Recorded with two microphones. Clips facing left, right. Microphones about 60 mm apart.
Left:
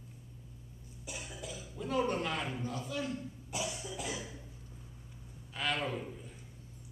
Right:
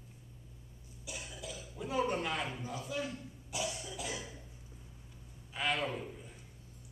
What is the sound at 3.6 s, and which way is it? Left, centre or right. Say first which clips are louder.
Cough: even; centre.